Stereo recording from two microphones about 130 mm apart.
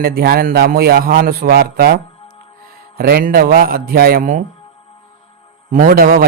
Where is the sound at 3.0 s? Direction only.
90° right.